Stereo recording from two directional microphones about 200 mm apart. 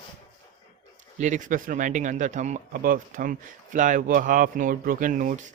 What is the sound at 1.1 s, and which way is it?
Speech, 40° right (ahead or behind).